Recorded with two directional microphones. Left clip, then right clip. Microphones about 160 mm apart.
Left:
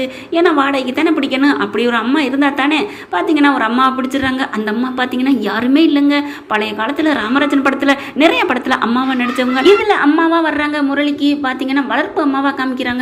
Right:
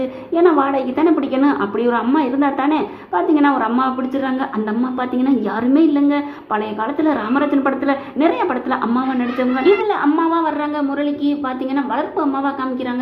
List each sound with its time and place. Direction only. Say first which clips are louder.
0.3 s a woman's voice: left 2 dB; 10° left (ahead or behind)
4.9 s a woman's voice: left 3 dB; 10° left (ahead or behind)